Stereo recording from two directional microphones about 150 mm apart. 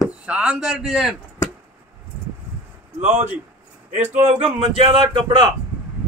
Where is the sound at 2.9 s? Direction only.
50° right (ahead or behind); by 5.4 s 35° right (ahead or behind).